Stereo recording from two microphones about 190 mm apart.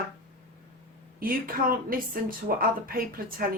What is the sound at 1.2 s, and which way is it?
Speech, 50° right (ahead or behind).